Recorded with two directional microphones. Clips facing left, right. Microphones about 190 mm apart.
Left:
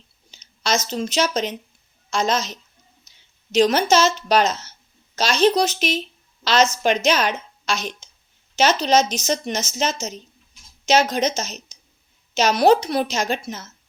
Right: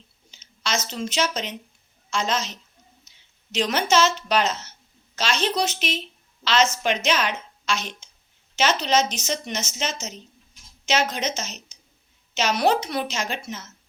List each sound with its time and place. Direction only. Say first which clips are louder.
0.3 s a woman's voice: left 5 dB; 40° left (ahead or behind)